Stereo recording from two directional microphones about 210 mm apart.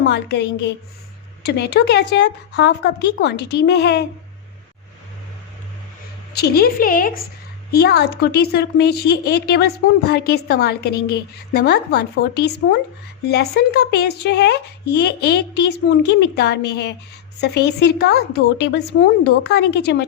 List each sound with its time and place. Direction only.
0.1 s a woman's voice: 55° left (ahead or behind)
6.3 s speech: 50° left (ahead or behind)